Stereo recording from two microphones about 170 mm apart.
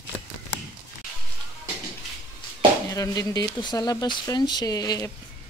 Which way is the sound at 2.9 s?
20° left (ahead or behind).